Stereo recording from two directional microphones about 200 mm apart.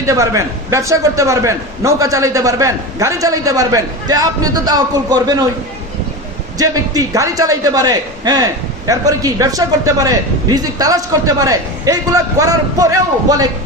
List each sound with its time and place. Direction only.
0.0 s a man's voice: 15° right (ahead or behind)
6.6 s a man's voice: 15° right (ahead or behind)